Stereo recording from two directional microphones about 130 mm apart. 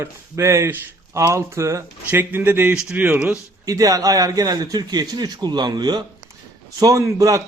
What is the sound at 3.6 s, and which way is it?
A man's voice, 25° right (ahead or behind).